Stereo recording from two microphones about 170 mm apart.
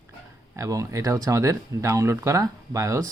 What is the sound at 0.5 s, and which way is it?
Speech, 20° right (ahead or behind).